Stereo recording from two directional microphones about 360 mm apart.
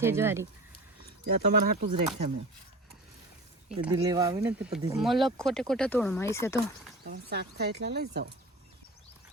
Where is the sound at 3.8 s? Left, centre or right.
Centre.